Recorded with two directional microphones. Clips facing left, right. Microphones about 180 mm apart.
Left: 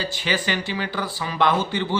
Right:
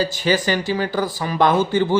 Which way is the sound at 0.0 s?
40° right (ahead or behind).